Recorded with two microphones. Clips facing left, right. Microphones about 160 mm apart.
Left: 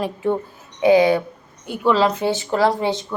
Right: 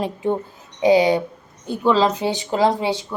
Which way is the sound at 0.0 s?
20° right (ahead or behind).